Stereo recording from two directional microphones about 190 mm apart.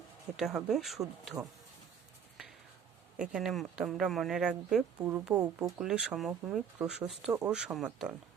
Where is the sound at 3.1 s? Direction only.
5° right (ahead or behind).